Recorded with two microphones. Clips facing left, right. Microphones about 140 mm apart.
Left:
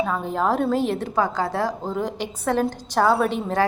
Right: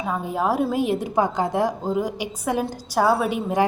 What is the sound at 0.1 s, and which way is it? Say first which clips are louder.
A woman's voice: left 1 dB; 10° right (ahead or behind).